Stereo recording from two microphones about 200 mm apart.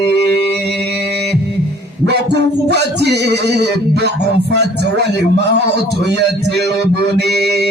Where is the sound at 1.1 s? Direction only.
55° right (ahead or behind).